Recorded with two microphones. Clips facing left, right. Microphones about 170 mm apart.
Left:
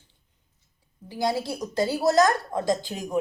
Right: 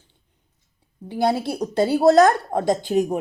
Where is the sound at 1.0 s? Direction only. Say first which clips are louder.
Right 5 dB; 60° right (ahead or behind).